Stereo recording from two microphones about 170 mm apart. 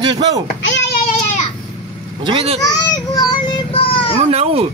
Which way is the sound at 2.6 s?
20° left (ahead or behind).